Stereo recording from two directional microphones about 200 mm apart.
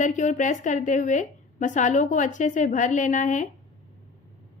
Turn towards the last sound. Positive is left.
turn(degrees=40)  # may be behind; listen again after turning